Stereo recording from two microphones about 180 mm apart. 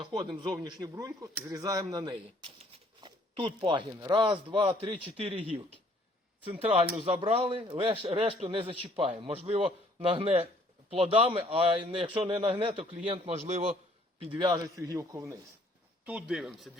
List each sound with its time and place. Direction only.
0.0 s a man's voice: 25° right (ahead or behind)
14.3 s speech: 25° right (ahead or behind)
16.0 s speech: 5° right (ahead or behind)